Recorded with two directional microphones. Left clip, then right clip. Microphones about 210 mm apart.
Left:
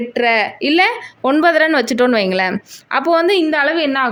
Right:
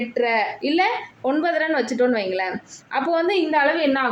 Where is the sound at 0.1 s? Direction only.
50° left (ahead or behind).